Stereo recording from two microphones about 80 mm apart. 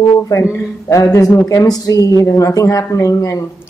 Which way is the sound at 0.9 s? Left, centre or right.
Left.